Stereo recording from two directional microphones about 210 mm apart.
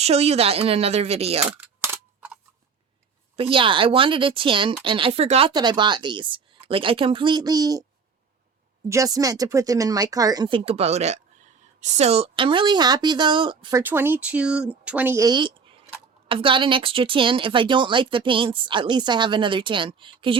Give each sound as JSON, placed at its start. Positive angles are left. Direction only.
{"t": 0.0, "sound": "speech", "side_deg": -30}
{"t": 1.5, "sound": "a sound", "side_deg": -10}
{"t": 3.3, "sound": "speech", "side_deg": -25}
{"t": 8.9, "sound": "speech", "side_deg": -15}